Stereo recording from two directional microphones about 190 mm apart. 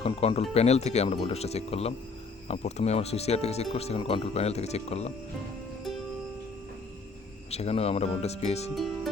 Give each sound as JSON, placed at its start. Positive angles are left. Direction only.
{"t": 0.0, "sound": "speech", "side_deg": 30}
{"t": 7.5, "sound": "speech", "side_deg": 35}